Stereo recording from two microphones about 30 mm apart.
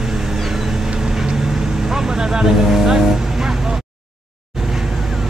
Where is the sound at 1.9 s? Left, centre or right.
Centre.